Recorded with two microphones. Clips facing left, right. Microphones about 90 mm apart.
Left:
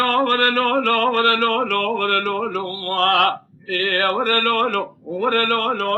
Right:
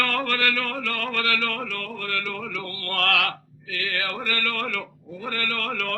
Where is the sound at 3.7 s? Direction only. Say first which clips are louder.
Left 10 dB; 55° left (ahead or behind).